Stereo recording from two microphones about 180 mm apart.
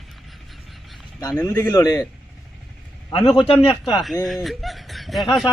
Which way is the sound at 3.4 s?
30° left (ahead or behind).